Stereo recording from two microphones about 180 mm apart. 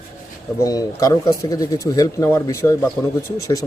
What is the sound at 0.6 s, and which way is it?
Speech, 20° left (ahead or behind).